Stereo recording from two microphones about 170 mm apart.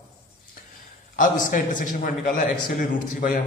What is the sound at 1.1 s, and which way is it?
A man's voice, 50° left (ahead or behind).